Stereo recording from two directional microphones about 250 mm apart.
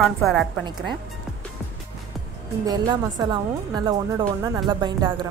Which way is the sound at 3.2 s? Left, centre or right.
Centre.